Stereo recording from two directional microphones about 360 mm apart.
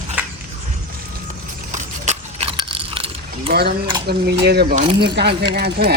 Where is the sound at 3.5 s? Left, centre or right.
Right.